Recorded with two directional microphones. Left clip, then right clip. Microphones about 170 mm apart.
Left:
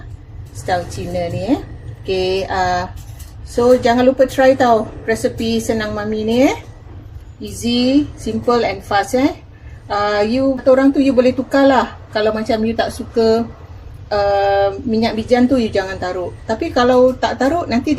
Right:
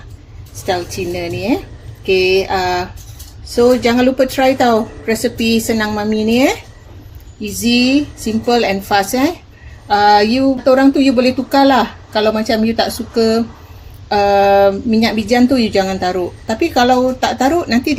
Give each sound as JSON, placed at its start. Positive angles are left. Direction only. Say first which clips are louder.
{"t": 2.0, "sound": "speech", "louder": "right 5 dB", "side_deg": -55}
{"t": 7.6, "sound": "speech", "louder": "right 2 dB", "side_deg": -50}